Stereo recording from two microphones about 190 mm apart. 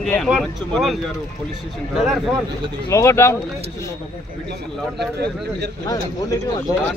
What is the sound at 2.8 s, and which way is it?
Speech, 15° left (ahead or behind).